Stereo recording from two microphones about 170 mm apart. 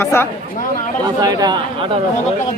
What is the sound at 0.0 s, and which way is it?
Speech, 15° left (ahead or behind).